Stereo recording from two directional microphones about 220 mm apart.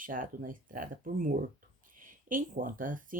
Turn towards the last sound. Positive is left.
turn(degrees=-40)  # may be behind; listen again after turning